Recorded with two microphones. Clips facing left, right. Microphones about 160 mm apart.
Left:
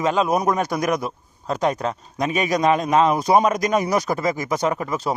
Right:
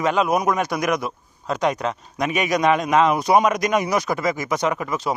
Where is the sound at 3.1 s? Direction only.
30° left (ahead or behind).